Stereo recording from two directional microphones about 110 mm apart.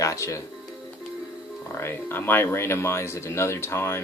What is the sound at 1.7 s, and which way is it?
Speech, 20° left (ahead or behind).